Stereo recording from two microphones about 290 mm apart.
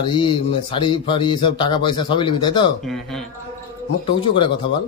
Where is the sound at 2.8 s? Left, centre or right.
Centre.